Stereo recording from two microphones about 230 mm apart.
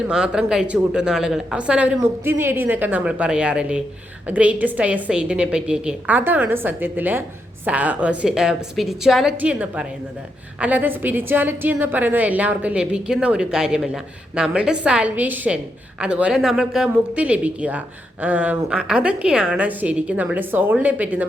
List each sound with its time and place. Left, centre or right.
0.1 s a woman's voice: centre